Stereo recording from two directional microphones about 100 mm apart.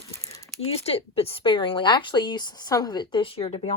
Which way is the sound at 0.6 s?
85° left.